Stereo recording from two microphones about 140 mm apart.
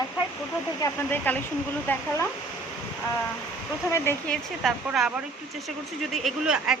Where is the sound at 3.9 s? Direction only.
15° left (ahead or behind).